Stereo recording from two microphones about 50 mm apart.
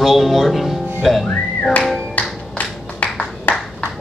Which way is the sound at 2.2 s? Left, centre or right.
Left.